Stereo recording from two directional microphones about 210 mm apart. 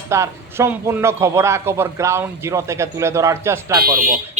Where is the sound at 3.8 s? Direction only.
40° right (ahead or behind).